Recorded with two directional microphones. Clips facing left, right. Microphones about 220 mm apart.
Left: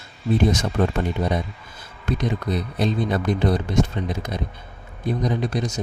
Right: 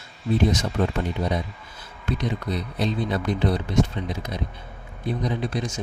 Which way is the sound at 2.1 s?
50° left (ahead or behind).